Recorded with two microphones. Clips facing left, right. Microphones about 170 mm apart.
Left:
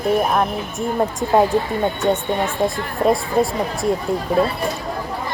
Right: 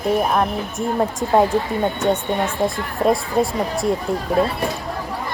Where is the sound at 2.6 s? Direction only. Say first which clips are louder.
Left 1 dB; centre (ahead or behind).